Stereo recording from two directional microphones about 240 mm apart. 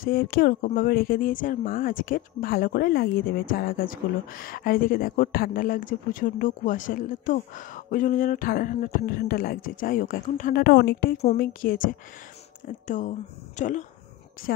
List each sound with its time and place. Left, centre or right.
0.0 s a woman's voice: left